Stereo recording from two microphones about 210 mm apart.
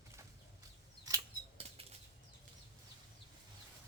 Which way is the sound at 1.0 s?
20° right (ahead or behind).